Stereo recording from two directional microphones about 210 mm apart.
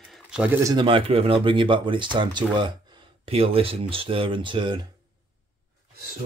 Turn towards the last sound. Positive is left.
turn(degrees=-20)  # may be behind; listen again after turning